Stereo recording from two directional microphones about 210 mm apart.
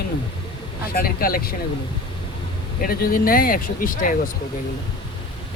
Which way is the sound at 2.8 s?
45° left (ahead or behind).